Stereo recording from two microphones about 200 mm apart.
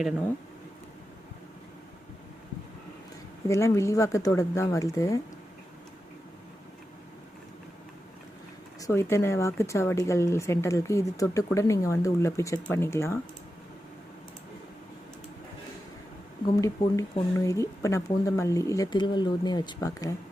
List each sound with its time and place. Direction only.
3.5 s speech: 15° left (ahead or behind)
8.8 s speech: 15° left (ahead or behind)
16.6 s speech: 15° left (ahead or behind)